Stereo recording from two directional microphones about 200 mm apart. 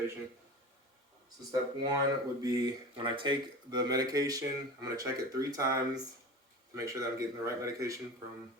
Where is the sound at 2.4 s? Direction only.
20° right (ahead or behind).